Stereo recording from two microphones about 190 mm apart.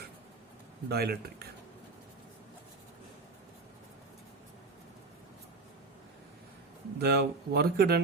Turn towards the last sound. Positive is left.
turn(degrees=-55)  # may be behind; listen again after turning